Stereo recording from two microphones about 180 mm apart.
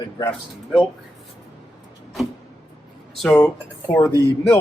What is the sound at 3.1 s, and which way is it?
Speech, 5° left (ahead or behind).